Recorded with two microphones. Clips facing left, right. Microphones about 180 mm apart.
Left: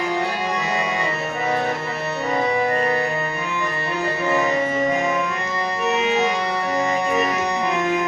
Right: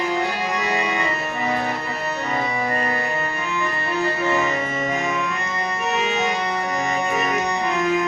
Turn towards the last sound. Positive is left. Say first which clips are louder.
# even
turn(degrees=20)  # may be behind; listen again after turning